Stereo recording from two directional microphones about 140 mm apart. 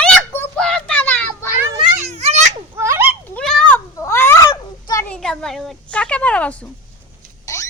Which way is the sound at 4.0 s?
20° left (ahead or behind).